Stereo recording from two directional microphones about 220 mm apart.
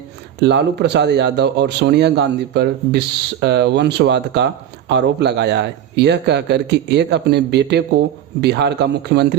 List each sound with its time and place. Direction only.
0.3 s speech: 50° right (ahead or behind)